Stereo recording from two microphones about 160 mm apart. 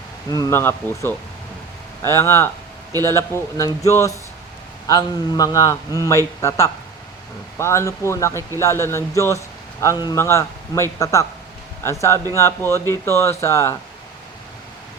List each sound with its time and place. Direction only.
0.3 s a man's voice: 20° left (ahead or behind)